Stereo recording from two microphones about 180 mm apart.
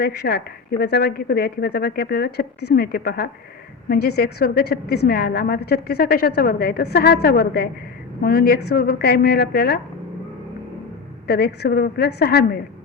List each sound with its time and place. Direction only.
0.0 s a woman's voice: 65° left (ahead or behind)
11.3 s a woman's voice: 65° left (ahead or behind)